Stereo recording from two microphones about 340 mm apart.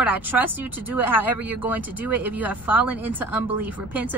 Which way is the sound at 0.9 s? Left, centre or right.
Centre.